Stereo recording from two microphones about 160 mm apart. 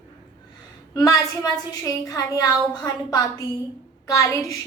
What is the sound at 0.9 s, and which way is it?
A woman's voice, 20° left (ahead or behind).